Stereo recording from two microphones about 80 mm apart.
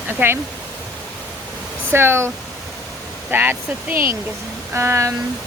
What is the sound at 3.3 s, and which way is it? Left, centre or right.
Speech, right.